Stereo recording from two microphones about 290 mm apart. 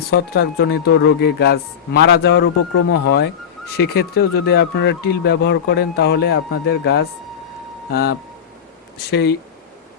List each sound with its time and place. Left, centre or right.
0.1 s speech: left